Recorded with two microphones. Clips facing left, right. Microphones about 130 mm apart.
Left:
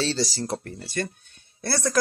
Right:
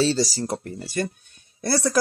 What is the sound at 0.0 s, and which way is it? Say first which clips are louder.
Speech: right 4 dB; 5° right (ahead or behind).